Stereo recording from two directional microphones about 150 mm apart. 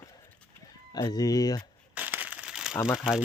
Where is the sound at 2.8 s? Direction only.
15° left (ahead or behind).